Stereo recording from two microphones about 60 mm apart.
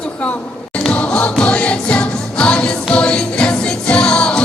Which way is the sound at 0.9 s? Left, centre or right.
Centre.